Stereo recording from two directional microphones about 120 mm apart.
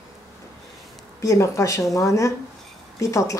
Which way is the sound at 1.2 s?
25° left (ahead or behind).